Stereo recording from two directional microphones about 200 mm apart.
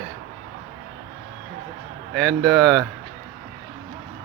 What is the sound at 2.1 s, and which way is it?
Speech, centre (ahead or behind).